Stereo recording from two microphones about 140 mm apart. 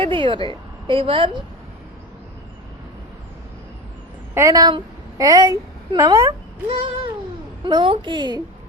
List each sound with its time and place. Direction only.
0.0 s a woman's voice: 35° right (ahead or behind)
4.4 s a woman's voice: 25° right (ahead or behind)
6.7 s a woman's voice: 40° right (ahead or behind)